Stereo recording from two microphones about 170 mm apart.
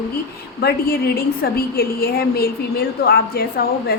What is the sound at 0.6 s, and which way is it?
A woman's voice, 65° left (ahead or behind).